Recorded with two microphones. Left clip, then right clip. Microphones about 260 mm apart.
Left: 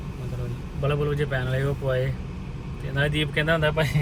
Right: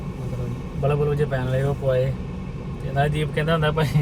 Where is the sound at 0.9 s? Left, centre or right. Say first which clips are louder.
Right 4 dB; centre.